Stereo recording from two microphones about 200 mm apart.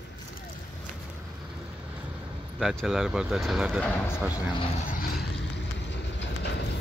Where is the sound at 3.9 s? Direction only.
10° left (ahead or behind).